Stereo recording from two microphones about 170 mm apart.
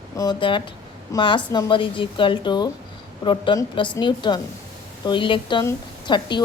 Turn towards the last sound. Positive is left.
turn(degrees=25)  # may be behind; listen again after turning